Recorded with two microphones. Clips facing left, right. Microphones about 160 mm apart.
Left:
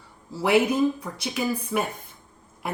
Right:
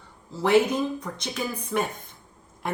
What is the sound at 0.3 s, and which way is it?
Speech, 10° left (ahead or behind).